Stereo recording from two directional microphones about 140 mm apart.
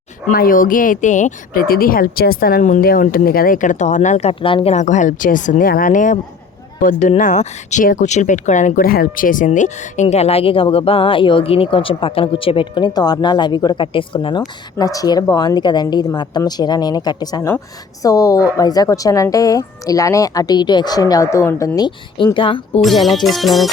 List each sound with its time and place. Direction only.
0.3 s a woman's voice: 85° left; by 4.7 s 40° left (ahead or behind)
4.7 s speech: 60° left (ahead or behind); by 22.8 s 40° left (ahead or behind)
22.8 s music: centre (ahead or behind)